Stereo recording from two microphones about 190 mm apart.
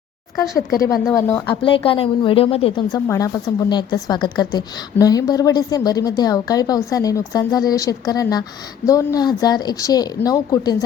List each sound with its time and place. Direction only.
0.3 s speech: centre (ahead or behind)
0.8 s a woman's voice: 20° left (ahead or behind)
1.6 s a woman's voice: 30° left (ahead or behind)
3.1 s a woman's voice: 15° left (ahead or behind)